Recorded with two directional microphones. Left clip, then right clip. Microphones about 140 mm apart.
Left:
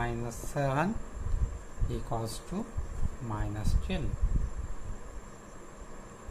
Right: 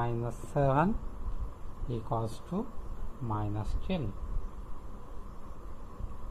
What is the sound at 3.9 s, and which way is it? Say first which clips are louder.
Speech: right 2 dB; 45° right (ahead or behind).